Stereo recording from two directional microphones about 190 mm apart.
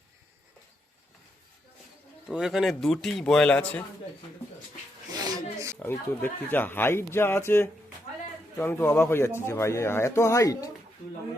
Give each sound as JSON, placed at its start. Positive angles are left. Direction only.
{"t": 2.2, "sound": "a man's voice", "side_deg": -5}
{"t": 5.1, "sound": "a sound", "side_deg": -20}
{"t": 5.8, "sound": "speech", "side_deg": 10}